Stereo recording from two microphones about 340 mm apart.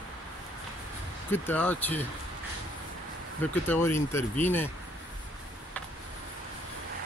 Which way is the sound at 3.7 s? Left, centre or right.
Centre.